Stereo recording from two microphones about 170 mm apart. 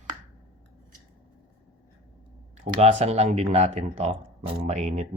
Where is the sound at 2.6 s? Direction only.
45° right (ahead or behind).